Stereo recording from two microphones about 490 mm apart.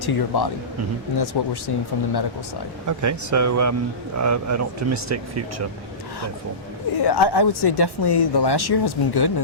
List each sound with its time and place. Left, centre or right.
0.0 s speech: left
2.8 s speech: right
7.0 s speech: left